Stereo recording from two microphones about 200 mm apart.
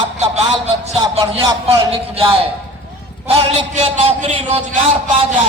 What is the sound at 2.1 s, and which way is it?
Speech, 25° right (ahead or behind).